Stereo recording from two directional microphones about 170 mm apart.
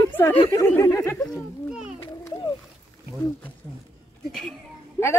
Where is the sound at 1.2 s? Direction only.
Centre (ahead or behind).